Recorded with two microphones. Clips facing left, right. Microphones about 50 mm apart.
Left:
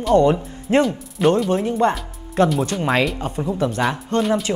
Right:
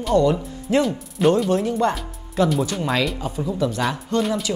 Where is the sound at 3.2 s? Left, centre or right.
Left.